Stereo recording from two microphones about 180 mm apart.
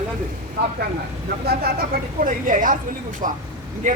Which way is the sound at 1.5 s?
60° right (ahead or behind).